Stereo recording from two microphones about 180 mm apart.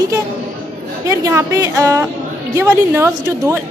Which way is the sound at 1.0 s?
15° right (ahead or behind).